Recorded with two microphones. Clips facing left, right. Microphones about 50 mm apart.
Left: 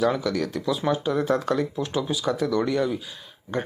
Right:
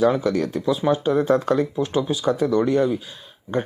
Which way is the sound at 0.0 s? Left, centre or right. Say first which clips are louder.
Right 4 dB; right.